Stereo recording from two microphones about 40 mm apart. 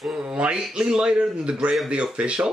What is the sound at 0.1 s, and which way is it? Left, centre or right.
Speech, right.